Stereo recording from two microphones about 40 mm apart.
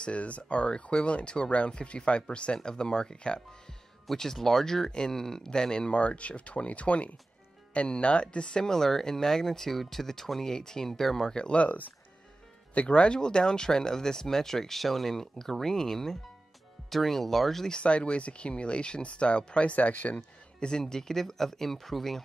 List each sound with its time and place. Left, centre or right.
0.0 s speech: left
4.1 s speech: centre; by 8.6 s left
8.6 s speech: centre
11.2 s speech: left
11.5 s speech: left; by 17.6 s centre
17.6 s speech: left
20.8 s speech: centre